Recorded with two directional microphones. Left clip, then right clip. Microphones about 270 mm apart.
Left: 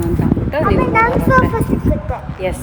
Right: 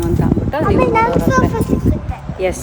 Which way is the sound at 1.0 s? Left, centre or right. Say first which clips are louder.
Left 2 dB; centre.